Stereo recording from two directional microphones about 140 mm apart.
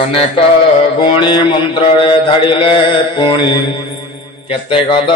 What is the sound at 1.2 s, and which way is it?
Mantra, 35° left (ahead or behind).